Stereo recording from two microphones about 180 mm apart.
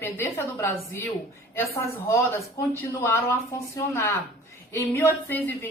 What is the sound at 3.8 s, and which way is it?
A woman's voice, 15° left (ahead or behind).